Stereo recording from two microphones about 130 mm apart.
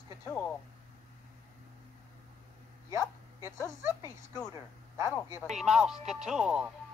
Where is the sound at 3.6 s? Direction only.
25° left (ahead or behind).